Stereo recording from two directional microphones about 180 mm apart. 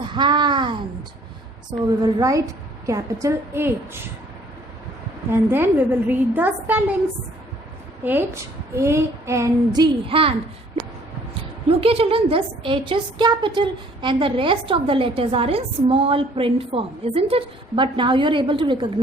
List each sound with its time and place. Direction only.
0.1 s a sound: 25° right (ahead or behind)
2.0 s a woman's voice: 20° right (ahead or behind)
5.3 s speech: 10° right (ahead or behind)
8.0 s speech: 10° right (ahead or behind); by 10.3 s 30° right (ahead or behind)
11.7 s a woman's voice: 30° right (ahead or behind)